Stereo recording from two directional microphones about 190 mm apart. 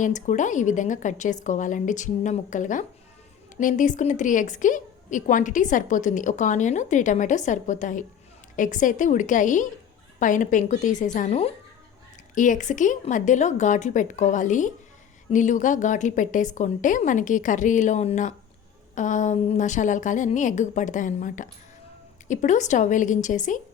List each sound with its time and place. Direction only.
0.0 s a woman's voice: 40° left (ahead or behind)